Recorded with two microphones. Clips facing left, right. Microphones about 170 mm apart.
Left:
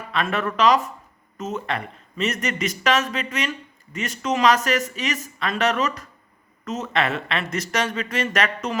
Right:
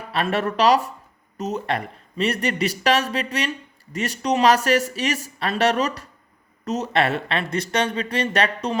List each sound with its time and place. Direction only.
0.1 s speech: 35° right (ahead or behind)